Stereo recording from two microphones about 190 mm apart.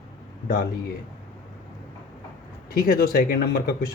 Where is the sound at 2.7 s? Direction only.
55° left (ahead or behind).